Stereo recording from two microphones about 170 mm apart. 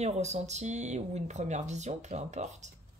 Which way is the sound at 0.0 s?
40° right (ahead or behind).